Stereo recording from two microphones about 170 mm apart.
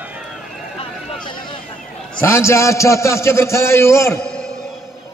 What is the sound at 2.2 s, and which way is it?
A man's voice, 15° left (ahead or behind).